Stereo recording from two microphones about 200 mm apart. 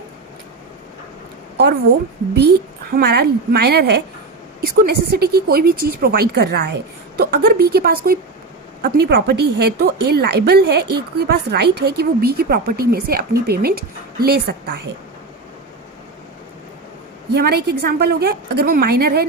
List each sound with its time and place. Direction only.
2.3 s a woman's voice: 55° right (ahead or behind)
17.3 s a woman's voice: 55° right (ahead or behind)